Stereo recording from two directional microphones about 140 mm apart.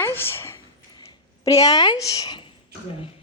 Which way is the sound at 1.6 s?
25° left (ahead or behind).